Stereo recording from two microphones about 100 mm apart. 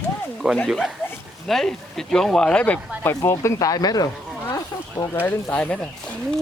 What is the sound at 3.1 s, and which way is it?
Speech, 30° left (ahead or behind).